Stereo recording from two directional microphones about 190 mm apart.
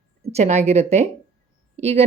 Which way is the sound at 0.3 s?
35° right (ahead or behind).